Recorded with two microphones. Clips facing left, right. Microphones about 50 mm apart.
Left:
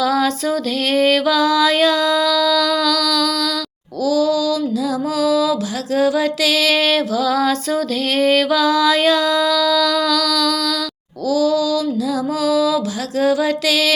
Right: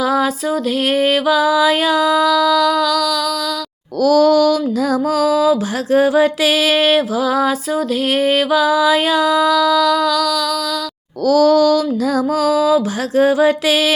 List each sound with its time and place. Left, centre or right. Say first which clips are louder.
0.0 s music: right 1 dB; centre
4.0 s music: right 5 dB; right; by 10.5 s centre
11.3 s music: right 5 dB; right